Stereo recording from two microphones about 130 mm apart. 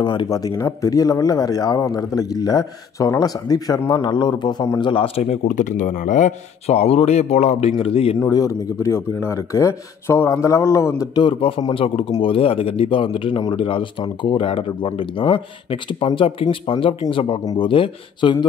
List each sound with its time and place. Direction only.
0.0 s a man's voice: 35° left (ahead or behind)
8.3 s speech: 25° left (ahead or behind)
11.1 s a man's voice: 40° left (ahead or behind)